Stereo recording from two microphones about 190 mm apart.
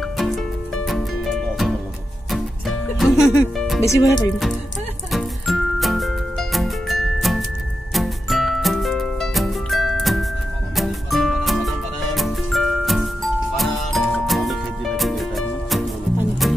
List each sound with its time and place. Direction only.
0.8 s music: centre (ahead or behind)
3.0 s music: centre (ahead or behind)
3.8 s speech: 15° left (ahead or behind)
5.1 s music: centre (ahead or behind)